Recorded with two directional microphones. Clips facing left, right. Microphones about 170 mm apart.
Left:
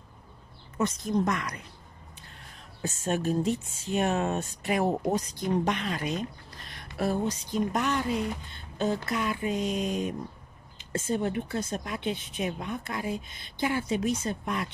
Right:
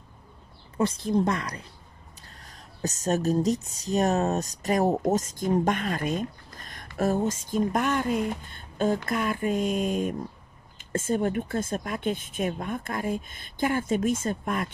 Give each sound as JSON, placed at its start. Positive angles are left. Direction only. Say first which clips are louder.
{"t": 0.7, "sound": "speech", "louder": "right 3 dB", "side_deg": -30}
{"t": 2.8, "sound": "speech", "louder": "right 3 dB", "side_deg": -40}